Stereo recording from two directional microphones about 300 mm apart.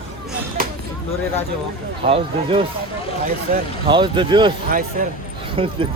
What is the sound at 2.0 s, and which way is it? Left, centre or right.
Speech, centre.